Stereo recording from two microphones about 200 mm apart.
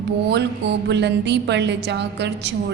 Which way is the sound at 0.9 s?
60° right (ahead or behind).